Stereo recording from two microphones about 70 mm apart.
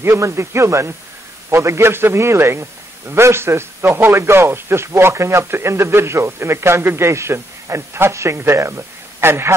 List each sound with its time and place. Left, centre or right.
0.0 s a man's voice: right